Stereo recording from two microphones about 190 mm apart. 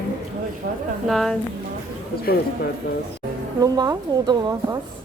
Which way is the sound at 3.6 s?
20° right (ahead or behind).